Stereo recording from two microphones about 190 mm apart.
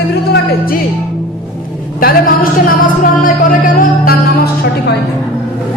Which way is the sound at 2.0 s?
50° left (ahead or behind).